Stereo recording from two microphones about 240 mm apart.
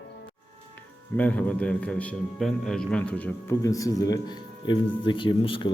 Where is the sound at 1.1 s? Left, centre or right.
Centre.